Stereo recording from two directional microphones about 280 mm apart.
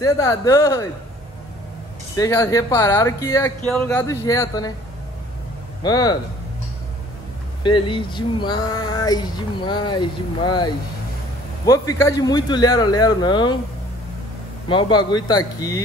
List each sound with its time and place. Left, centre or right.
0.0 s speech: centre
2.1 s speech: centre
5.8 s speech: centre
7.6 s speech: centre
14.7 s speech: centre